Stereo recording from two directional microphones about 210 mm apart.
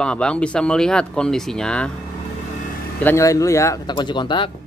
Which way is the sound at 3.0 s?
15° left (ahead or behind).